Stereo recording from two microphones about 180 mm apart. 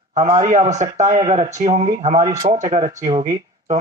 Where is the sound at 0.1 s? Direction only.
40° right (ahead or behind).